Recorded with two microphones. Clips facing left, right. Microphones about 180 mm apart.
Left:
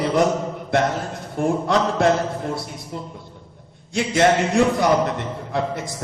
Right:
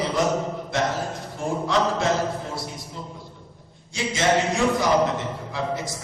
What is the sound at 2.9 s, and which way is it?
Music, 60° left (ahead or behind).